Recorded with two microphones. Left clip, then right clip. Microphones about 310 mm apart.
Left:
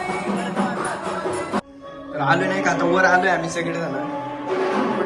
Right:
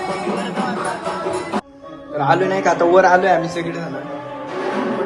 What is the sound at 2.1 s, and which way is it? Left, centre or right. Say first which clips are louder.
A man's voice: right 3 dB; centre.